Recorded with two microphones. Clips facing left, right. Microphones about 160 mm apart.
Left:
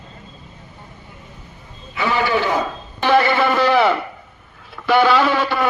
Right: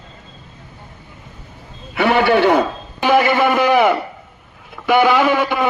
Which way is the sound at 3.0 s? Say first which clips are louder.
Right 1 dB; 15° right (ahead or behind).